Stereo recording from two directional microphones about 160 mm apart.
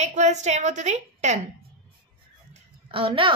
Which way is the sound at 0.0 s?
45° right (ahead or behind).